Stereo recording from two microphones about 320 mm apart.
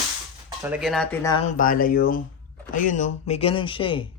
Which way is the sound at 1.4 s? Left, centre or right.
Left.